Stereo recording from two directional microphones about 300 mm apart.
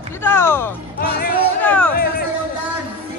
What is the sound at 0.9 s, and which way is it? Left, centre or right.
Speech, left.